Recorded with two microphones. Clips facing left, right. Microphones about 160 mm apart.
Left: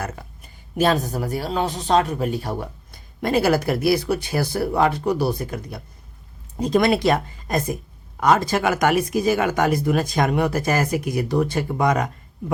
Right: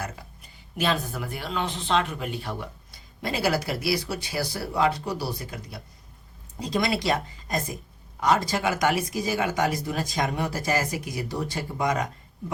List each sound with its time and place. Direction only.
0.8 s speech: 45° left (ahead or behind)